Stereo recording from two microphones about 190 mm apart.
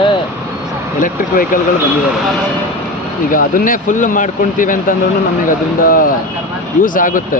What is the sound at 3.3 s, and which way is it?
Speech, 45° left (ahead or behind).